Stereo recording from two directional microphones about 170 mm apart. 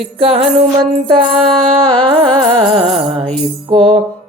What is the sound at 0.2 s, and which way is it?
Music, 35° right (ahead or behind).